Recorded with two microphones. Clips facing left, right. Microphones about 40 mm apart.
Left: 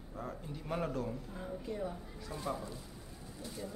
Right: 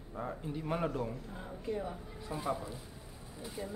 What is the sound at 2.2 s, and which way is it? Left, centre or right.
Speech, centre.